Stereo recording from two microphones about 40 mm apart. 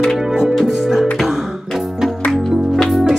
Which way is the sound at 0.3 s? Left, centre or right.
Centre.